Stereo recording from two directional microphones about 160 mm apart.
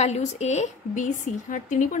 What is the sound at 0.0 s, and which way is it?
A woman's voice, 45° left (ahead or behind).